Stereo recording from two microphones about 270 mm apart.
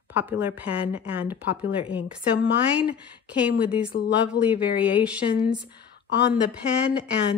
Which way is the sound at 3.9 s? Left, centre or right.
Left.